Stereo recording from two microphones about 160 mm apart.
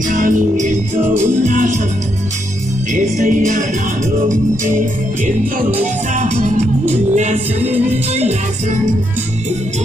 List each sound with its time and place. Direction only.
0.1 s music: 50° right (ahead or behind)
2.9 s music: 50° right (ahead or behind)
6.1 s music: 50° right (ahead or behind)